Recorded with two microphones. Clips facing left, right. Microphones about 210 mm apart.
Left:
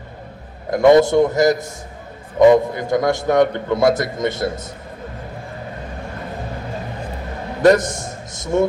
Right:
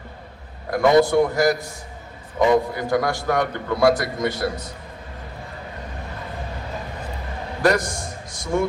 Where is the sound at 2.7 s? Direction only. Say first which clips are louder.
Left 3 dB; 20° left (ahead or behind).